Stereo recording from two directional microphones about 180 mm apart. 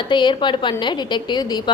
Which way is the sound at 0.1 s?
25° left (ahead or behind).